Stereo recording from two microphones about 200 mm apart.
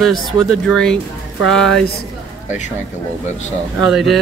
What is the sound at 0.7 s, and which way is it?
Speech, 5° left (ahead or behind).